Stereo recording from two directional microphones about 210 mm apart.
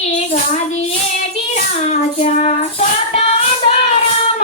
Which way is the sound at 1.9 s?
35° left (ahead or behind).